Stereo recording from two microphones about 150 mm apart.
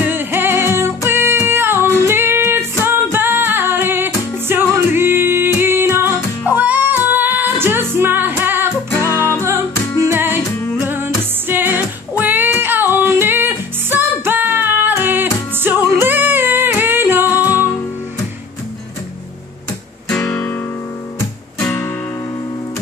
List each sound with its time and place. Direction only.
0.0 s music: 15° right (ahead or behind)
8.9 s music: 15° left (ahead or behind)
10.1 s music: 15° right (ahead or behind)
20.2 s guitar: 10° left (ahead or behind)
21.5 s music: 5° left (ahead or behind)